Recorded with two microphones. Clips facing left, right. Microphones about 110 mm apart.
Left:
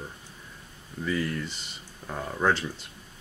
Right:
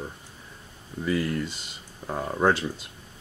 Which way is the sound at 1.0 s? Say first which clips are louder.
Right 3 dB; 10° right (ahead or behind).